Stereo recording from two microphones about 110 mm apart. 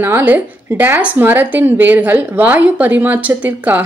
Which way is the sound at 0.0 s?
20° right (ahead or behind).